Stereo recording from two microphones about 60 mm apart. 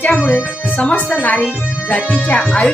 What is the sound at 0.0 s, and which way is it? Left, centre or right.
Speech, left.